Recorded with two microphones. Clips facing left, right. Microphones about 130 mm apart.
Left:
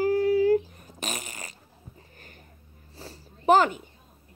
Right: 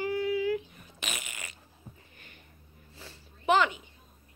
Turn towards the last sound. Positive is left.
turn(degrees=45)  # may be behind; listen again after turning